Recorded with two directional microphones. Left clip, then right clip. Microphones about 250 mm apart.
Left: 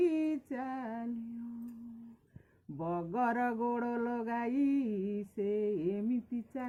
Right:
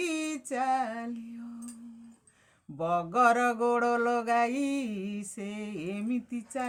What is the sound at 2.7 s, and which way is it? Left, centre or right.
Mantra, centre.